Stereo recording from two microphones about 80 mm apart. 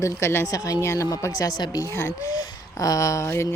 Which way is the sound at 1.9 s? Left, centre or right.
Left.